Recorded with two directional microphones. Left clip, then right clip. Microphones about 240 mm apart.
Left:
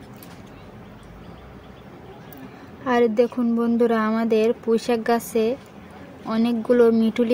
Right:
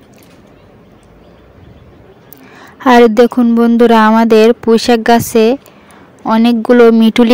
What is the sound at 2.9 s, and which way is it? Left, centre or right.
Speech, right.